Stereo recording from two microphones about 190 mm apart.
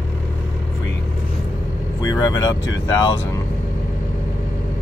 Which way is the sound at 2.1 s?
20° left (ahead or behind).